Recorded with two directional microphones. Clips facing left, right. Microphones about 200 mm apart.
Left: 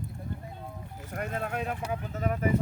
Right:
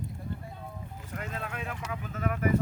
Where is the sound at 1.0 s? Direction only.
55° left (ahead or behind); by 2.4 s 30° left (ahead or behind).